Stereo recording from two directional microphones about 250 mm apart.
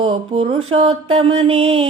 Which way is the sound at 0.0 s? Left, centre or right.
Right.